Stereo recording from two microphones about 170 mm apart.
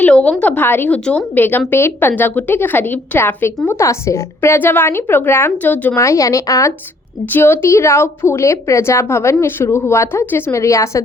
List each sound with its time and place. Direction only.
0.0 s a woman's voice: 5° left (ahead or behind)